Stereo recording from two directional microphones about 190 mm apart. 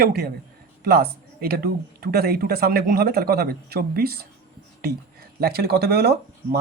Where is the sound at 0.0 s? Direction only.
50° right (ahead or behind).